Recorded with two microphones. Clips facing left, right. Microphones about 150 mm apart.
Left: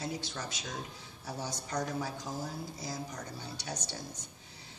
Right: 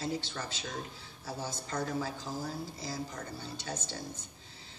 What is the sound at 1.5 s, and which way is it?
Speech, 15° left (ahead or behind).